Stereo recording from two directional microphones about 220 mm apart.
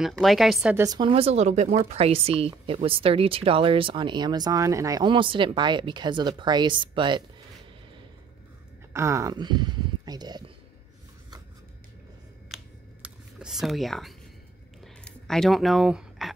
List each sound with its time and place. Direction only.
0.0 s speech: centre (ahead or behind)
0.8 s speech: 20° right (ahead or behind)
8.9 s speech: 15° right (ahead or behind)
13.0 s a sound: 5° right (ahead or behind)
15.0 s speech: centre (ahead or behind)